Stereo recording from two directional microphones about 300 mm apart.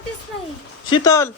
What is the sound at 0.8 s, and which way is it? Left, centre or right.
Speech, centre.